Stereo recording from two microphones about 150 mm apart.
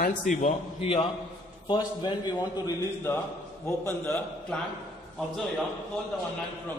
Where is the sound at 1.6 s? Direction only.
30° left (ahead or behind).